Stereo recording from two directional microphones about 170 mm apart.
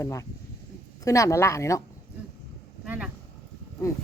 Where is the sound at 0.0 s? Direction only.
20° left (ahead or behind).